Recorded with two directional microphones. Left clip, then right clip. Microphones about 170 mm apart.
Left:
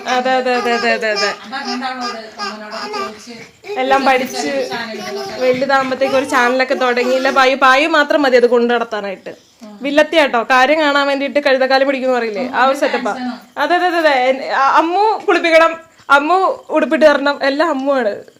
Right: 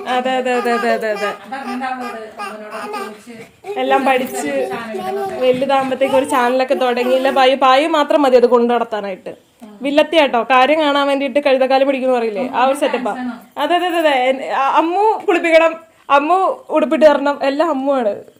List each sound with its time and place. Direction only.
0.0 s a woman's voice: centre (ahead or behind)
0.5 s a woman's voice: 15° right (ahead or behind)
3.8 s a woman's voice: centre (ahead or behind)